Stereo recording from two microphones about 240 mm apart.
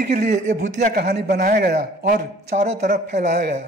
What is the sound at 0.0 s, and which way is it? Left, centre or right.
Speech, right.